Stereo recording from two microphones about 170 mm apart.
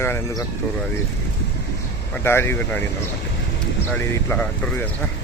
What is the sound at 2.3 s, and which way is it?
Speech, 15° left (ahead or behind).